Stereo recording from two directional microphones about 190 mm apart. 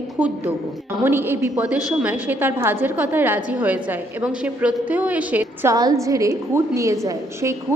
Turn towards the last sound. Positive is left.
turn(degrees=-15)  # may be behind; listen again after turning